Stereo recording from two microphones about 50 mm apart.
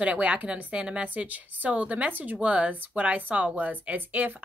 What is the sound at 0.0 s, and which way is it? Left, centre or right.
A woman's voice, right.